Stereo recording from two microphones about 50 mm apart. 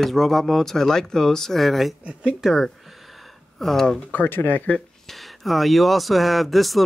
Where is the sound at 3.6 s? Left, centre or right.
Centre.